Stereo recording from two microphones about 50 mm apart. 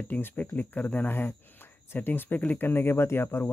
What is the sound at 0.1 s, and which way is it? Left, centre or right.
Speech, left.